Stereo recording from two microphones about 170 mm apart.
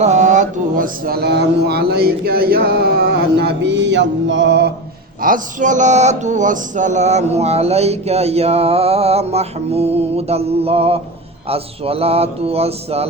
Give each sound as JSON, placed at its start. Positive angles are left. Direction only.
{"t": 0.0, "sound": "speech", "side_deg": -45}
{"t": 5.2, "sound": "speech", "side_deg": -50}